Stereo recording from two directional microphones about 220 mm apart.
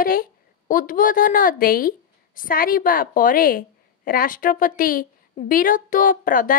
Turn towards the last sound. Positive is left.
turn(degrees=35)  # may be behind; listen again after turning